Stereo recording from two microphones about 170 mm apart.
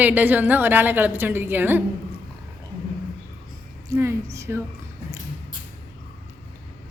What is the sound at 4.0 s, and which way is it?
Speech, 15° right (ahead or behind).